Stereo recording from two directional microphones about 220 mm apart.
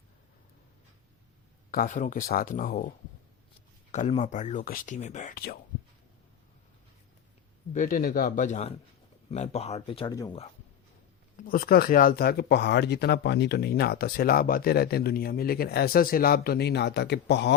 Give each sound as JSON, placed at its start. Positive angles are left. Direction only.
{"t": 1.7, "sound": "speech", "side_deg": 35}
{"t": 3.9, "sound": "speech", "side_deg": 30}
{"t": 7.7, "sound": "speech", "side_deg": 35}
{"t": 11.3, "sound": "speech", "side_deg": 40}